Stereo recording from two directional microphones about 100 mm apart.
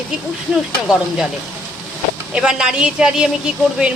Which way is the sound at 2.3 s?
10° right (ahead or behind).